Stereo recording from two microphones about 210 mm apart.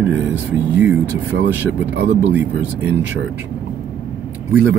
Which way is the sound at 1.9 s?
55° right (ahead or behind).